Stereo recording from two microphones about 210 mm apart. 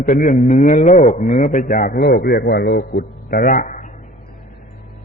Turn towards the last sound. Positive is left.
turn(degrees=35)  # may be behind; listen again after turning